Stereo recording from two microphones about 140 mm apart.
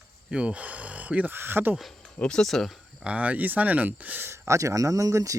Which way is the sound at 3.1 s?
10° right (ahead or behind).